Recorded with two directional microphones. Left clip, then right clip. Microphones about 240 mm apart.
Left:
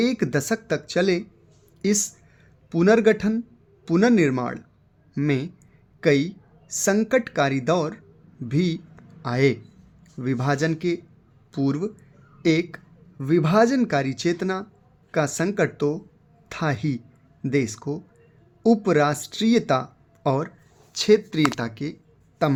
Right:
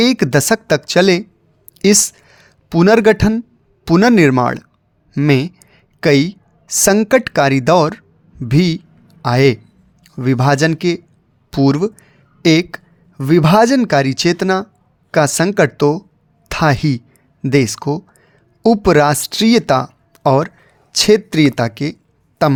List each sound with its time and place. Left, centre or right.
0.0 s a woman's voice: right